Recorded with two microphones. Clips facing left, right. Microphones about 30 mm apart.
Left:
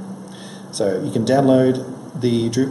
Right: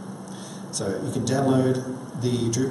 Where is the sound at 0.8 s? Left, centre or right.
Left.